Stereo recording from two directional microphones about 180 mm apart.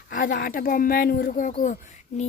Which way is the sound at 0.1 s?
50° left (ahead or behind).